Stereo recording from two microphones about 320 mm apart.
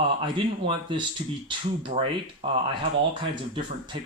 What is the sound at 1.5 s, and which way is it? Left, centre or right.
Speech, centre.